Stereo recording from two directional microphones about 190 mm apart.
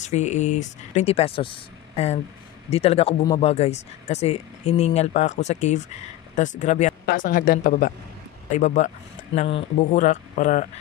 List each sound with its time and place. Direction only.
0.1 s speech: 40° left (ahead or behind)